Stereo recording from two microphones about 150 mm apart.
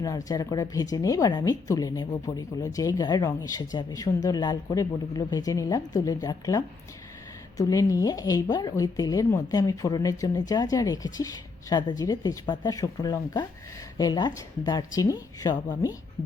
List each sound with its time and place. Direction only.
0.3 s a woman's voice: 25° left (ahead or behind)